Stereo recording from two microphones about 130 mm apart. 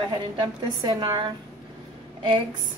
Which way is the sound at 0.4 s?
35° right (ahead or behind).